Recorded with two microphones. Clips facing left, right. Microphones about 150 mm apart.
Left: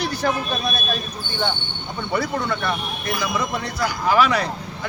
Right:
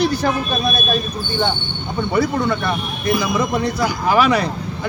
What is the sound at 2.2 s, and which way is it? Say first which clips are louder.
Speech: right 5 dB; 20° right (ahead or behind).